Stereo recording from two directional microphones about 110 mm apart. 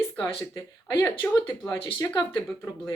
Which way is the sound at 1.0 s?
20° left (ahead or behind).